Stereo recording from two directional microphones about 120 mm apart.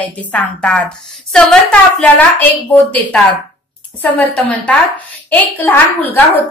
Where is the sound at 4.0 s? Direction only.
15° left (ahead or behind).